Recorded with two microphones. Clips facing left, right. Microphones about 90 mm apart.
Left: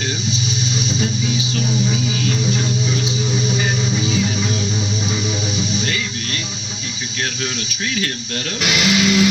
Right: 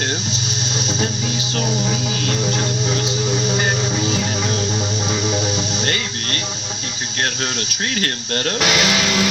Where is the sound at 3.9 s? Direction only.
55° right (ahead or behind).